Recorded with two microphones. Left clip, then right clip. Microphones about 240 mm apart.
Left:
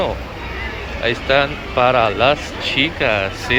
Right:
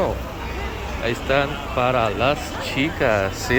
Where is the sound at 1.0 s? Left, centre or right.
Centre.